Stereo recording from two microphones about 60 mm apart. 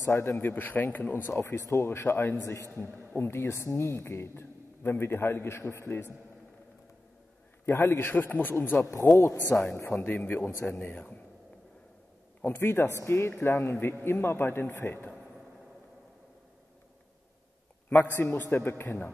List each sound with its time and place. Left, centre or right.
0.0 s speech: left
1.4 s speech: left
2.7 s speech: left
7.6 s speech: left
9.2 s speech: left
12.4 s speech: left
17.8 s speech: left